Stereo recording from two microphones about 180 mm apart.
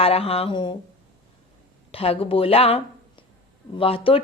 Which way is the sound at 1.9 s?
30° left (ahead or behind).